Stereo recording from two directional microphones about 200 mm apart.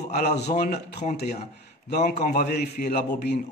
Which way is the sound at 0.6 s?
50° left (ahead or behind).